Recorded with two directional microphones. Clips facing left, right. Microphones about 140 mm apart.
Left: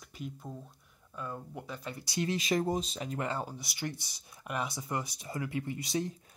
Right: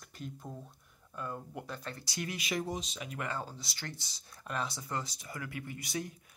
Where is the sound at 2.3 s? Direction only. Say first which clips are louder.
Left 5 dB; 40° left (ahead or behind).